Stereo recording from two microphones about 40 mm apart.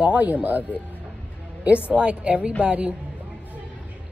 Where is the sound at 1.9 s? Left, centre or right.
Right.